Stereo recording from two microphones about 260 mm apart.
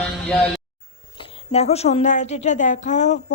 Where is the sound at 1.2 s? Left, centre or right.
Left.